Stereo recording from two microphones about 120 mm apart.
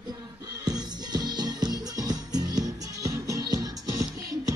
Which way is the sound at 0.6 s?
35° right (ahead or behind).